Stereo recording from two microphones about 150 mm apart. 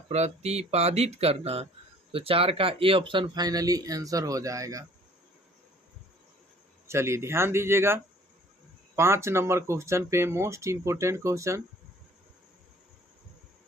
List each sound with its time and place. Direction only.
0.1 s speech: 45° right (ahead or behind); by 4.9 s 20° right (ahead or behind)
6.8 s speech: 15° right (ahead or behind)